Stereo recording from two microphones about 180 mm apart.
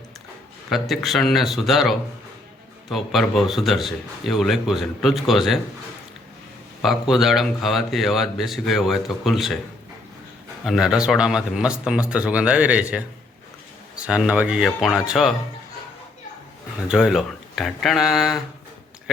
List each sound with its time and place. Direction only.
0.7 s a man's voice: centre (ahead or behind)
6.8 s a man's voice: centre (ahead or behind)
10.7 s a man's voice: centre (ahead or behind)
16.9 s a man's voice: 5° right (ahead or behind)